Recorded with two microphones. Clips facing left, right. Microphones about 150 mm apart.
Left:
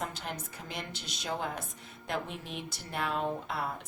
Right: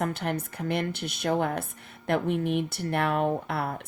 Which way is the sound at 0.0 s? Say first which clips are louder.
Right 9 dB; 60° right (ahead or behind).